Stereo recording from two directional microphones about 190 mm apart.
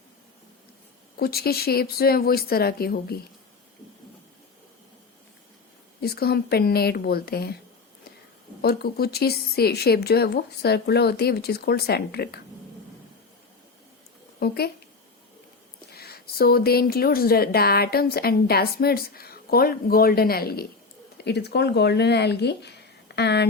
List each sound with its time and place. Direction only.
1.1 s speech: 55° left (ahead or behind)
6.0 s a woman's voice: 55° left (ahead or behind)
8.6 s a woman's voice: 55° left (ahead or behind)
14.3 s speech: 55° left (ahead or behind)
15.9 s a woman's voice: 55° left (ahead or behind)